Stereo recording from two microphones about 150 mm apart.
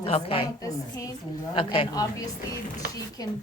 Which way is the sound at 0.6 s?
20° left (ahead or behind).